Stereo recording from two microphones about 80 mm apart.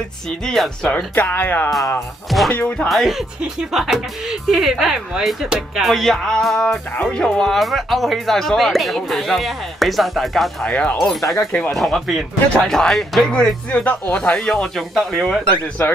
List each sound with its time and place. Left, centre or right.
0.4 s speech: centre
1.1 s speech: left
2.2 s speech: centre
2.5 s speech: centre
2.9 s speech: centre
7.0 s speech: centre
10.7 s speech: centre
11.0 s speech: centre
15.8 s speech: left